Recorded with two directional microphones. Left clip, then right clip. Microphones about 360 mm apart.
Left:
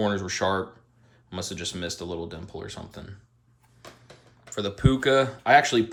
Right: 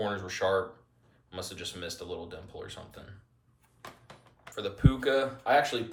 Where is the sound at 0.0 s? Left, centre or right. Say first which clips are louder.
Left 5 dB; centre.